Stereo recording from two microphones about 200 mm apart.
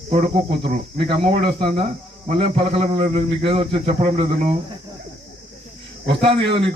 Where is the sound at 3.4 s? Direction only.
25° right (ahead or behind).